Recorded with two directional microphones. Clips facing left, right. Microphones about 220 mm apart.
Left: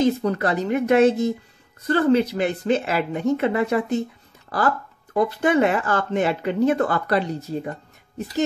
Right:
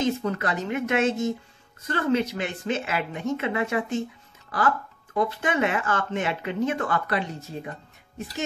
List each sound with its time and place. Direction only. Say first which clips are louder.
0.0 s speech: left 5 dB; 35° left (ahead or behind)